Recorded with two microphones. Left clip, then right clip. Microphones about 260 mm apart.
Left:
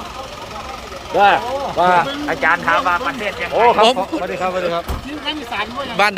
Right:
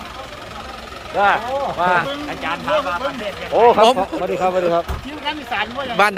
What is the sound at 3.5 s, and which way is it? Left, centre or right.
Speech, right.